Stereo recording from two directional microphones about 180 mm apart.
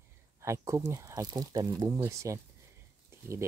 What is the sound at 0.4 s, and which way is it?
Speech, 15° right (ahead or behind).